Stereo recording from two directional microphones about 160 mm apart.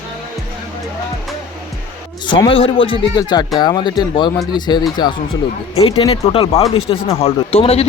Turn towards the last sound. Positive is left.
turn(degrees=40)  # may be behind; listen again after turning